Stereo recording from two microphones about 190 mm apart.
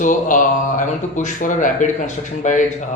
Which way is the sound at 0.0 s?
40° left (ahead or behind).